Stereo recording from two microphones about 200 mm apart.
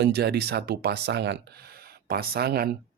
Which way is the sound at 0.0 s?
55° right (ahead or behind).